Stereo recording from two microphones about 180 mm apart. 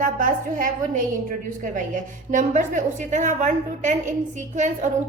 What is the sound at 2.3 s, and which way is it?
A woman's voice, 45° right (ahead or behind).